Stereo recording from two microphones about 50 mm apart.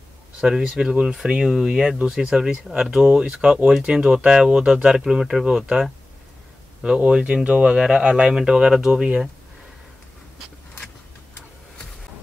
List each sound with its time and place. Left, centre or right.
0.4 s speech: centre
2.3 s speech: centre
8.0 s speech: right
8.3 s speech: centre